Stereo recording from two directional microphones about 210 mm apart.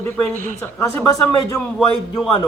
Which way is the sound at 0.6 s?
10° left (ahead or behind).